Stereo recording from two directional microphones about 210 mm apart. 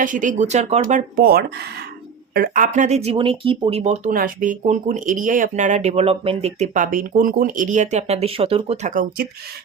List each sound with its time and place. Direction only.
0.0 s speech: 40° right (ahead or behind)